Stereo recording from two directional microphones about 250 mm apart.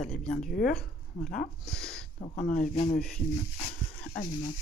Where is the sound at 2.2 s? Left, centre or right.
Left.